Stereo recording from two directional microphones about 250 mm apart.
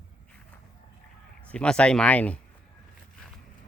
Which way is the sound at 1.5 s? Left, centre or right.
Centre.